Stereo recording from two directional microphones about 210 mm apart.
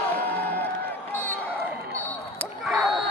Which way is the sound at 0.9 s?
10° left (ahead or behind).